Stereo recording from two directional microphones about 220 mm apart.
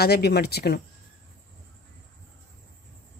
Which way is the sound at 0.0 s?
45° left (ahead or behind).